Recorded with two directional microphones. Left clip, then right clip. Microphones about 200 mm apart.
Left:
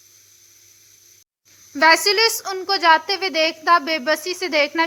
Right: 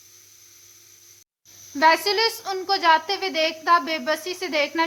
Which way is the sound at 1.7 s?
20° left (ahead or behind).